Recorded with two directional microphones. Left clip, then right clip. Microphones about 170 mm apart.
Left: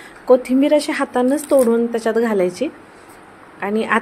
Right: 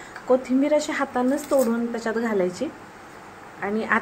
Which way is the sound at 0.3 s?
30° left (ahead or behind).